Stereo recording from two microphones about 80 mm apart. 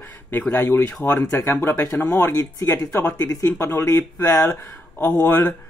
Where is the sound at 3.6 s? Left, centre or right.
Left.